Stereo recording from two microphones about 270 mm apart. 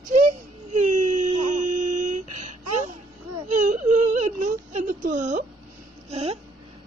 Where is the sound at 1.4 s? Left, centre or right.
Right.